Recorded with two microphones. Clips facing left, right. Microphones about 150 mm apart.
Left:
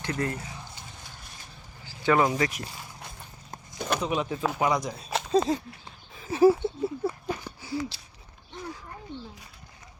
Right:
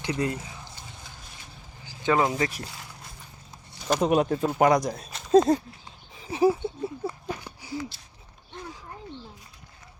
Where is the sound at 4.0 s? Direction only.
50° right (ahead or behind).